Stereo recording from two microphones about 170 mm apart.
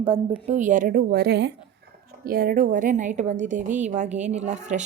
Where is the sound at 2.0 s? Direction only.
60° right (ahead or behind); by 4.9 s 45° right (ahead or behind).